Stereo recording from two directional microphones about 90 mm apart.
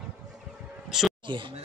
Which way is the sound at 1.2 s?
65° right (ahead or behind).